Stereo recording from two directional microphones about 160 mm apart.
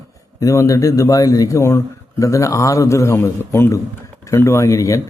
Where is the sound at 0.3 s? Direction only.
20° left (ahead or behind).